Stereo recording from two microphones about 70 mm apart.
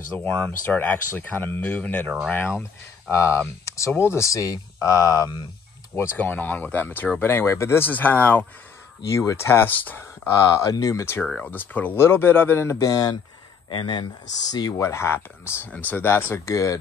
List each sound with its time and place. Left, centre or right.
0.1 s speech: left
3.1 s speech: left
6.1 s speech: left
7.9 s speech: left
9.1 s speech: left
10.3 s speech: left
11.4 s speech: left
12.6 s speech: left
13.7 s speech: left
14.8 s speech: left